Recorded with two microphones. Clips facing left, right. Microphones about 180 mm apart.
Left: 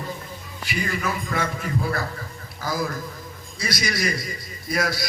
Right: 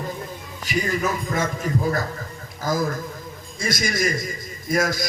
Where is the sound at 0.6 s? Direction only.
40° right (ahead or behind).